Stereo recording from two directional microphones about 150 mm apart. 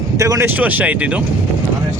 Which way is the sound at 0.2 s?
20° right (ahead or behind).